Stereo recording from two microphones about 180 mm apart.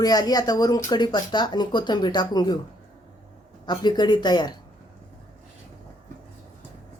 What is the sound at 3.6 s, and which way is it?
Speech, 25° left (ahead or behind).